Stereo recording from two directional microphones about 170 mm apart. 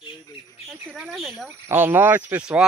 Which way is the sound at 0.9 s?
5° right (ahead or behind).